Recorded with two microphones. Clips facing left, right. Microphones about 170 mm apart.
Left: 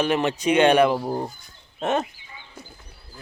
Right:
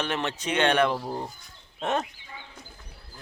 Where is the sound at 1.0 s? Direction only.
35° left (ahead or behind).